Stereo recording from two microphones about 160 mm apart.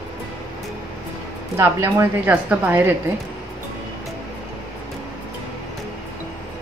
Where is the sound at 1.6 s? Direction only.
20° right (ahead or behind).